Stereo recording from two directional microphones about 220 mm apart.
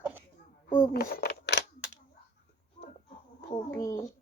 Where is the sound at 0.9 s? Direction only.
45° left (ahead or behind).